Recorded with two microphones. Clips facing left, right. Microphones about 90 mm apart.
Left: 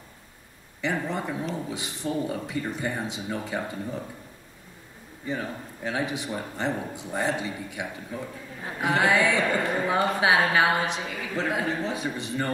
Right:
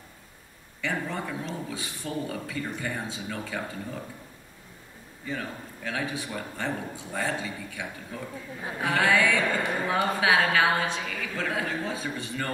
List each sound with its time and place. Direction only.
1.0 s a man's voice: 15° left (ahead or behind)
5.2 s a man's voice: 20° left (ahead or behind)